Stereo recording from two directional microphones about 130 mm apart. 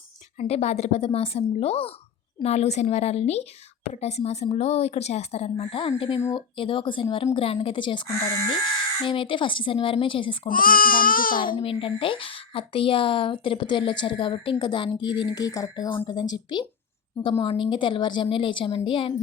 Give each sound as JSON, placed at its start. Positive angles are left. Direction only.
{"t": 0.3, "sound": "a woman's voice", "side_deg": 55}
{"t": 8.0, "sound": "speech", "side_deg": 25}
{"t": 9.0, "sound": "a woman's voice", "side_deg": 40}
{"t": 10.5, "sound": "speech", "side_deg": 90}
{"t": 11.3, "sound": "a woman's voice", "side_deg": 40}